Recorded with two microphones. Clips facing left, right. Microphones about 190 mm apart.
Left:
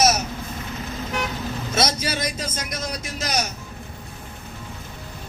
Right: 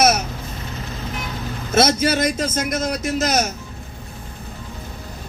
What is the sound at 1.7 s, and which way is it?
A man's voice, 50° right (ahead or behind).